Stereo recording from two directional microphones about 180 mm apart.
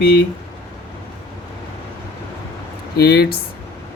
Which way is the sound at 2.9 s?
60° left (ahead or behind).